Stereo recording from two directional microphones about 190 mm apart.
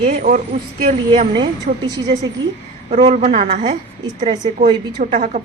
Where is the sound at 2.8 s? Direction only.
35° right (ahead or behind).